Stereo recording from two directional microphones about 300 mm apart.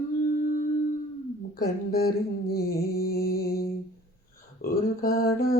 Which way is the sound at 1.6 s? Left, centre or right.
Left.